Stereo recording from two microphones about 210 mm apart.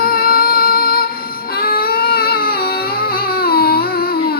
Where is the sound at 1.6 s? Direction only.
45° left (ahead or behind).